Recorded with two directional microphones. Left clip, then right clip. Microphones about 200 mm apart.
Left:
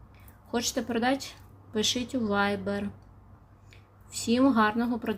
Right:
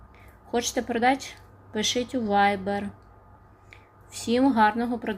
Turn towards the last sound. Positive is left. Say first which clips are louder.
# right 2 dB
turn(degrees=10)  # may be behind; listen again after turning